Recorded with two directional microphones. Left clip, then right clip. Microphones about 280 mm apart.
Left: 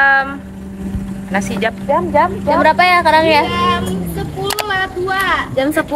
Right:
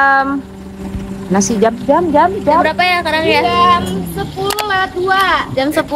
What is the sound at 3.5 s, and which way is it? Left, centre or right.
Child singing, right.